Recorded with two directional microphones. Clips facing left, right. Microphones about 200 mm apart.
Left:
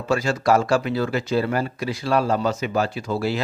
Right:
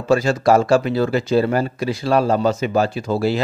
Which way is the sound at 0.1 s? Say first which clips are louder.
Right 5 dB; 30° right (ahead or behind).